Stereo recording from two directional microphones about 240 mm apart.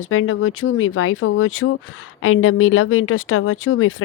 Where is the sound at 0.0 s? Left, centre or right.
Left.